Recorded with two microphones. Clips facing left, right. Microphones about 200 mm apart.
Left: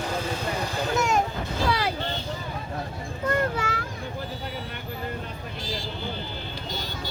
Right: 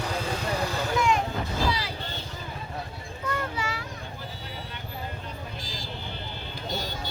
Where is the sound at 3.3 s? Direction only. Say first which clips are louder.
Left 6 dB; 50° left (ahead or behind).